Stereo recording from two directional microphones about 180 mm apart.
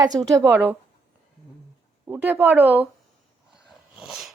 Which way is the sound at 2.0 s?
10° right (ahead or behind).